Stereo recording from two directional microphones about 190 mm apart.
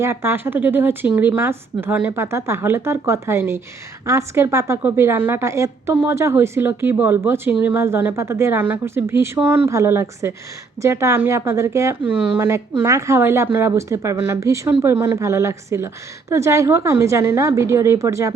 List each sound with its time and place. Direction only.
0.0 s a woman's voice: 15° right (ahead or behind)